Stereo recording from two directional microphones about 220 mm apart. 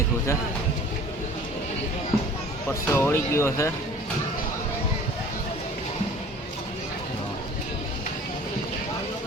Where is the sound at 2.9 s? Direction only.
10° left (ahead or behind).